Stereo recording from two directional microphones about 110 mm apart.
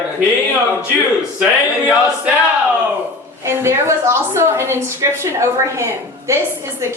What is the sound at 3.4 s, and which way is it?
A woman's voice, 25° right (ahead or behind).